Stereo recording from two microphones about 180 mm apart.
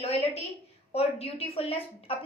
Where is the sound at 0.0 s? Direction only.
35° left (ahead or behind).